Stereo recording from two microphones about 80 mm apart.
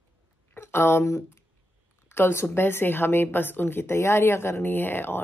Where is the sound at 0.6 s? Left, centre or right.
Left.